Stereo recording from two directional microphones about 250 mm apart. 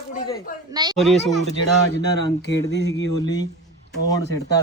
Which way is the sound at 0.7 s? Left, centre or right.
Centre.